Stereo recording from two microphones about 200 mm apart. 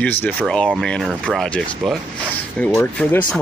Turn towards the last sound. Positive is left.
turn(degrees=10)  # may be behind; listen again after turning